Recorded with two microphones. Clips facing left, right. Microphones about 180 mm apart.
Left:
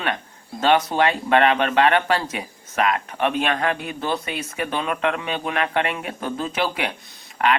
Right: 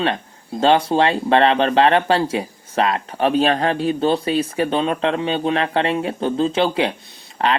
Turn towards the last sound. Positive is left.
turn(degrees=-30)  # may be behind; listen again after turning